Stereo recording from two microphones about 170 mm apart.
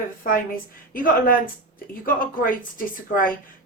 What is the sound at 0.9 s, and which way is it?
Speech, 55° left (ahead or behind).